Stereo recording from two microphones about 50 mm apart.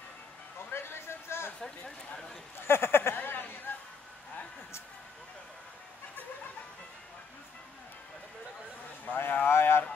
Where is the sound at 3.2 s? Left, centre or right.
Left.